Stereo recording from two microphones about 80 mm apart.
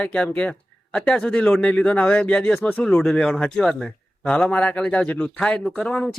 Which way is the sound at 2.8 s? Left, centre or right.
Centre.